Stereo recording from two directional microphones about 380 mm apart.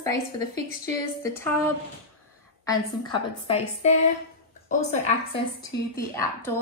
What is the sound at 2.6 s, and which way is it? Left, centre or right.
A woman's voice, centre.